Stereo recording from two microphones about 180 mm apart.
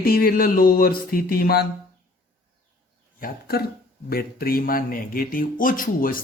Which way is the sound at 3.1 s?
55° left (ahead or behind).